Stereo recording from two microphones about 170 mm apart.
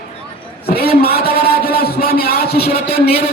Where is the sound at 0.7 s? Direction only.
65° left (ahead or behind).